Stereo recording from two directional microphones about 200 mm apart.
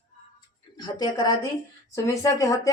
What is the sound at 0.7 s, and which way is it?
A woman's voice, 20° left (ahead or behind).